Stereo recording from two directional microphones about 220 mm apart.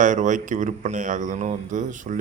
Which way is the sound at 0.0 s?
35° right (ahead or behind).